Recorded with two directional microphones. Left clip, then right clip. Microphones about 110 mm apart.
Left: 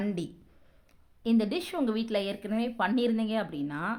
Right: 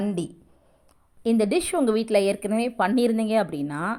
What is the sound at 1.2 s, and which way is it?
A woman's voice, 45° right (ahead or behind).